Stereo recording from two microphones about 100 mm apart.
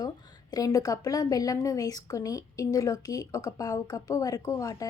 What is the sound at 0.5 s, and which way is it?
A woman's voice, 35° left (ahead or behind).